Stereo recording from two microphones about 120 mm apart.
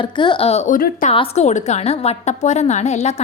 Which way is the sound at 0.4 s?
65° left (ahead or behind).